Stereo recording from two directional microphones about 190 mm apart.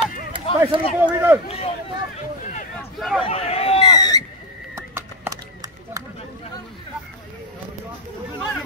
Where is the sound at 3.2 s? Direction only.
30° left (ahead or behind).